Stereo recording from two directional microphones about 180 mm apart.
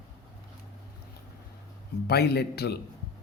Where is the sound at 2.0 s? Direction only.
60° left (ahead or behind).